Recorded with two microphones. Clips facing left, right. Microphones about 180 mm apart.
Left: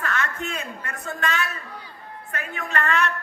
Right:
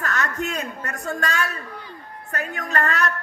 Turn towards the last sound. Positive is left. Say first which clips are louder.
# right 1 dB
turn(degrees=-40)  # may be behind; listen again after turning